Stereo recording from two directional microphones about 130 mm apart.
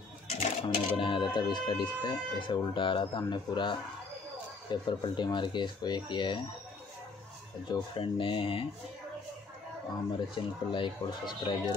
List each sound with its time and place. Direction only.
0.3 s speech: 45° left (ahead or behind)
7.7 s speech: 40° left (ahead or behind)
10.1 s speech: 40° left (ahead or behind)